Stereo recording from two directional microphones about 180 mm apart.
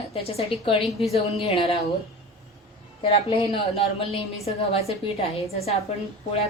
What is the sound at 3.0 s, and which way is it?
A woman's voice, 35° left (ahead or behind).